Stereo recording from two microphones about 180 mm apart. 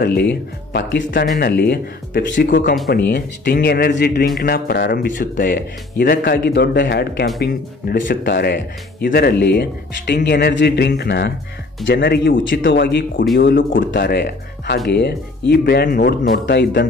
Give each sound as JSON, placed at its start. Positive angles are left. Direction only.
{"t": 0.0, "sound": "speech", "side_deg": 65}
{"t": 2.5, "sound": "speech", "side_deg": 55}
{"t": 3.1, "sound": "speech", "side_deg": 65}
{"t": 13.5, "sound": "speech", "side_deg": 55}